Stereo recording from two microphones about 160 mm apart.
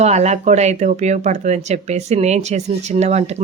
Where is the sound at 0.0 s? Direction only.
45° right (ahead or behind).